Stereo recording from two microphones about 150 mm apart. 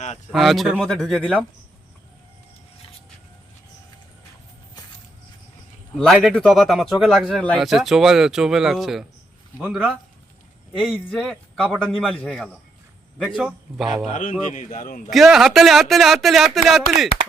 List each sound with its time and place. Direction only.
0.3 s speech: centre (ahead or behind)
6.1 s speech: 10° right (ahead or behind)
14.1 s a man's voice: 60° left (ahead or behind)
15.1 s speech: centre (ahead or behind)